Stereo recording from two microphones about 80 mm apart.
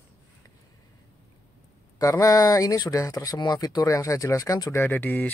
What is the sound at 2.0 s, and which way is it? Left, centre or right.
Speech, left.